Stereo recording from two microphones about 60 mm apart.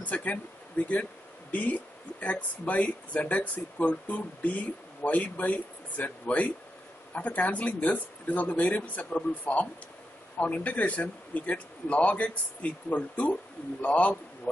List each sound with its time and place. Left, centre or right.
0.0 s speech: left
1.5 s a man's voice: left